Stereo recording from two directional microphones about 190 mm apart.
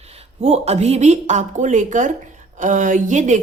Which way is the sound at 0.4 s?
35° right (ahead or behind).